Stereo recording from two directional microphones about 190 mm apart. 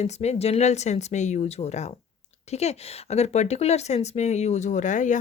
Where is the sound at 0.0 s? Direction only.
35° left (ahead or behind).